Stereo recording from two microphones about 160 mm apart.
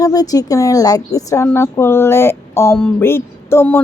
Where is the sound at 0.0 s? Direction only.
25° left (ahead or behind).